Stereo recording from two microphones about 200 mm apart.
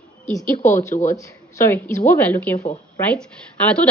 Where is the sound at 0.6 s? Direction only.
40° left (ahead or behind).